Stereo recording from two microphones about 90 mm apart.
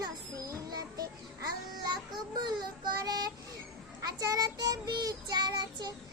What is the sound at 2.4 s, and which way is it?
Child singing, 55° right (ahead or behind).